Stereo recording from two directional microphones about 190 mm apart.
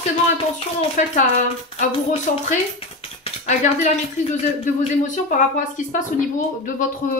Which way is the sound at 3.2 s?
40° left (ahead or behind).